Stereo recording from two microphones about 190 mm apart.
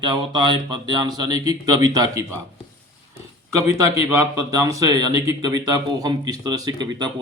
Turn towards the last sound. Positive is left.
turn(degrees=-20)  # may be behind; listen again after turning